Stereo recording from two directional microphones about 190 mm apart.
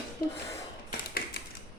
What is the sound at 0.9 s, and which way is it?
Tap, 50° left (ahead or behind).